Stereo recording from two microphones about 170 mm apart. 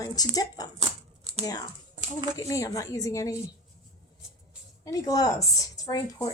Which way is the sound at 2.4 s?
20° left (ahead or behind).